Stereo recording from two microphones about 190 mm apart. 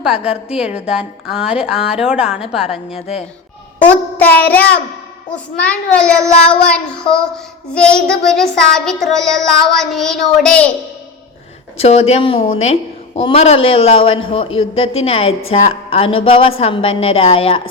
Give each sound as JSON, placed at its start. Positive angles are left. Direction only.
{"t": 0.1, "sound": "speech", "side_deg": 30}
{"t": 0.5, "sound": "child singing", "side_deg": -5}
{"t": 4.2, "sound": "child singing", "side_deg": 10}
{"t": 11.8, "sound": "a man's voice", "side_deg": 35}